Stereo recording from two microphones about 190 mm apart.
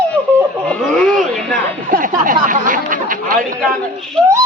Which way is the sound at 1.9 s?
45° right (ahead or behind).